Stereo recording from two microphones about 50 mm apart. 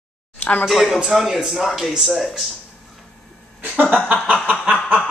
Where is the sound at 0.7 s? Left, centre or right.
Centre.